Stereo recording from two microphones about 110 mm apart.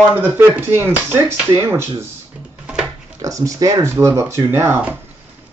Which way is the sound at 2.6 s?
10° right (ahead or behind).